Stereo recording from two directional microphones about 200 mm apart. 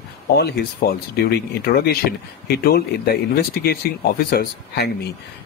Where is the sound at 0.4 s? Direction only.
55° left (ahead or behind).